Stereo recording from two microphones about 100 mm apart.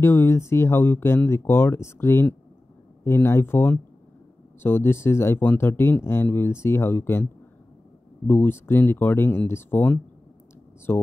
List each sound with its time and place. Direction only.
0.0 s speech: 25° left (ahead or behind)
8.3 s speech: 20° left (ahead or behind)